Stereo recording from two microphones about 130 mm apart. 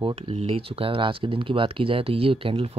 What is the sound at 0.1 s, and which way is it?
Speech, 50° right (ahead or behind).